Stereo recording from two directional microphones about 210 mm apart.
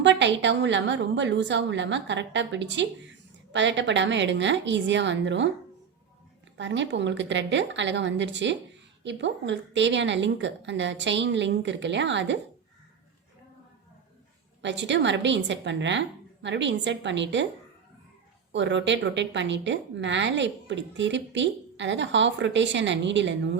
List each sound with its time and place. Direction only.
0.0 s a woman's voice: 55° right (ahead or behind)
6.6 s a woman's voice: 60° right (ahead or behind)
14.6 s a woman's voice: 60° right (ahead or behind)
18.5 s a woman's voice: 60° right (ahead or behind)